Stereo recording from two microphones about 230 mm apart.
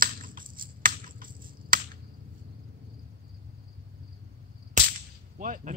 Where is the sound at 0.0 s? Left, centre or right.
Right.